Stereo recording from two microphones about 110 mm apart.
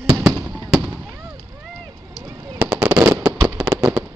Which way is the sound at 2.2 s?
30° right (ahead or behind).